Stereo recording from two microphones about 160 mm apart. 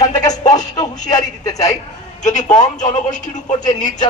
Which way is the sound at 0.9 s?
25° left (ahead or behind).